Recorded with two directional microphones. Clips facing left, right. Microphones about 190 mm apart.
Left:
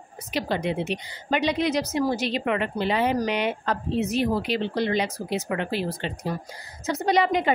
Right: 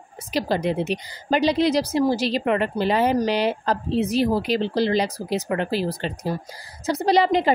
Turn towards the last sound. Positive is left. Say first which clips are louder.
# right 3 dB
turn(degrees=-35)  # may be behind; listen again after turning